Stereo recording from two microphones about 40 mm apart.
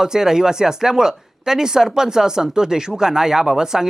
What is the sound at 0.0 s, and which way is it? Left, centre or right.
Speech, centre.